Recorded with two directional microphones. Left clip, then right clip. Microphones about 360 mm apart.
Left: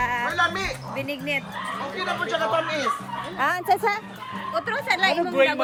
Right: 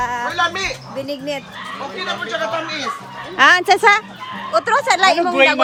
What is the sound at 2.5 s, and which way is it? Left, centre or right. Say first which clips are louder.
Speech: right 1 dB; centre.